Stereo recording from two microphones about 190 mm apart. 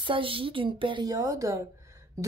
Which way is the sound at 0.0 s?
25° right (ahead or behind).